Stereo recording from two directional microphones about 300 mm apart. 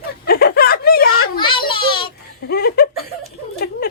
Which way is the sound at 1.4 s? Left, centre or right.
Centre.